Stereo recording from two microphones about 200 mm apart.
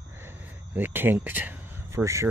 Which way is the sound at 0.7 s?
10° right (ahead or behind).